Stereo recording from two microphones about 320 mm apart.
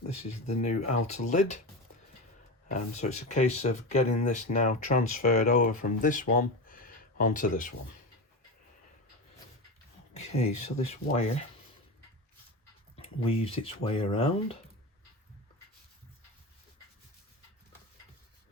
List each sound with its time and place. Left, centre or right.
0.6 s speech: left
2.6 s speech: left
10.2 s speech: centre
13.0 s speech: centre